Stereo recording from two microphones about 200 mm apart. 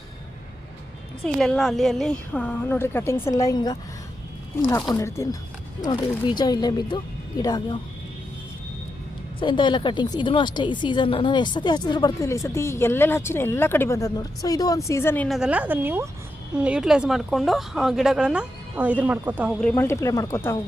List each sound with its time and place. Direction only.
1.2 s a woman's voice: centre (ahead or behind); by 7.8 s 20° left (ahead or behind)
9.4 s a woman's voice: 25° left (ahead or behind); by 15.4 s 10° left (ahead or behind)
15.4 s a woman's voice: 5° right (ahead or behind)
19.5 s a woman's voice: 10° left (ahead or behind)